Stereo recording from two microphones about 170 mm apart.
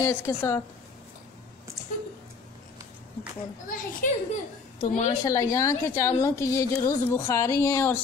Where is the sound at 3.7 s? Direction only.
55° left (ahead or behind).